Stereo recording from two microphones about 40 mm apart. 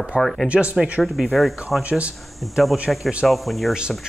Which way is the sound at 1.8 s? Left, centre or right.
Right.